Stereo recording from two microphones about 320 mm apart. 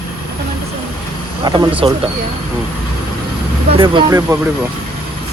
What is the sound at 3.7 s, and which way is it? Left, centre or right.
Speech, centre.